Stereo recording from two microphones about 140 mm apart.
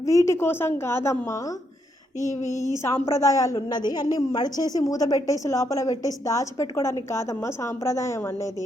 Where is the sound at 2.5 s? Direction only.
25° right (ahead or behind).